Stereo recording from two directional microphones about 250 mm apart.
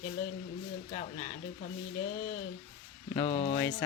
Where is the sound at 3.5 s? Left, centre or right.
Centre.